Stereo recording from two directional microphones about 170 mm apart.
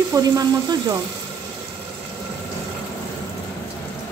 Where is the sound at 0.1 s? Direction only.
20° right (ahead or behind).